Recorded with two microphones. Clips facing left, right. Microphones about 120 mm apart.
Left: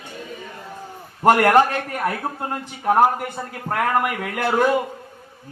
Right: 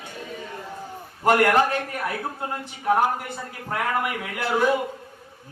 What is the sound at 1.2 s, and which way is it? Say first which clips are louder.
A man's voice: left 4 dB; 55° left (ahead or behind).